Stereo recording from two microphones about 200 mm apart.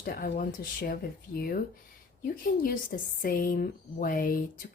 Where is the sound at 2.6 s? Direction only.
45° left (ahead or behind).